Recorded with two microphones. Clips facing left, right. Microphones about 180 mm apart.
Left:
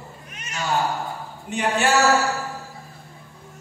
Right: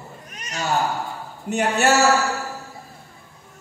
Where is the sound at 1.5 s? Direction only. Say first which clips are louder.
Right 3 dB; 45° right (ahead or behind).